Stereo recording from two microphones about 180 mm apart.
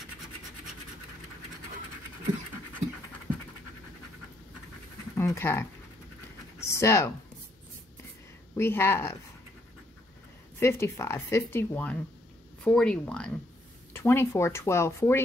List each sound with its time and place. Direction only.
5.1 s dog: 15° left (ahead or behind)
6.7 s speech: 15° left (ahead or behind)
8.5 s speech: 15° left (ahead or behind)
10.6 s speech: 15° left (ahead or behind)